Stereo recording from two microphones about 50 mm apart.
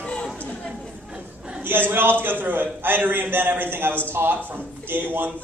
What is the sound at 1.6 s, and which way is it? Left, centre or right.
A man's voice, right.